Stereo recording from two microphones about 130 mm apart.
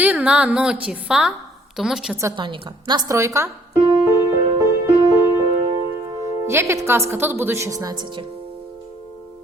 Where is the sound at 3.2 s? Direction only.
20° right (ahead or behind).